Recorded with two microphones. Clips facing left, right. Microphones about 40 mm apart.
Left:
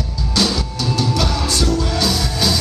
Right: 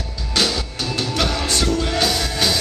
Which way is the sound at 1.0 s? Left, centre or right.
Right.